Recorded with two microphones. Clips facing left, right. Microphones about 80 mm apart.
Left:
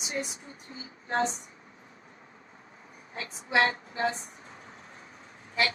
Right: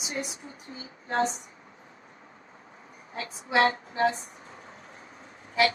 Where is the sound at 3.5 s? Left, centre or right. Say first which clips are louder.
Right 3 dB; right.